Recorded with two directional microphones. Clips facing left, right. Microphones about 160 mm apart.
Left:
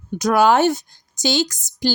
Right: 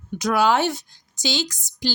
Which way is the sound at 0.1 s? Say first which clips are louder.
Left 4 dB; 45° left (ahead or behind).